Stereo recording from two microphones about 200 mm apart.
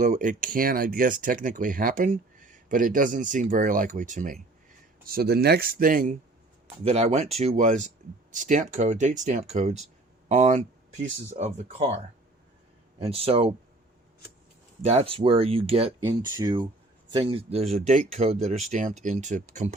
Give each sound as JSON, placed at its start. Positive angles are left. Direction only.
{"t": 0.0, "sound": "speech", "side_deg": -40}
{"t": 13.1, "sound": "speech", "side_deg": -30}
{"t": 14.8, "sound": "speech", "side_deg": -30}
{"t": 16.0, "sound": "speech", "side_deg": -20}